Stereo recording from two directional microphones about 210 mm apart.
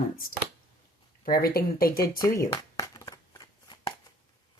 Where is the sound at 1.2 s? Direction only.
45° left (ahead or behind).